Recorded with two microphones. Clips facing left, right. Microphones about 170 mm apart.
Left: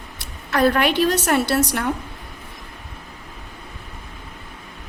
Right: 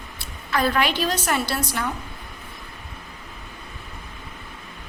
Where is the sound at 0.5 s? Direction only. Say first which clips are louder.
Left 5 dB; 55° left (ahead or behind); by 1.8 s 70° left (ahead or behind).